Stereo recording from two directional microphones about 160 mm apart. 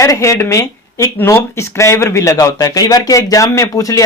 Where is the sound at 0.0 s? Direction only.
20° left (ahead or behind).